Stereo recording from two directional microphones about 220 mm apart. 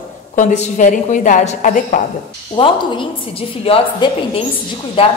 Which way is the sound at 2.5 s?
20° left (ahead or behind).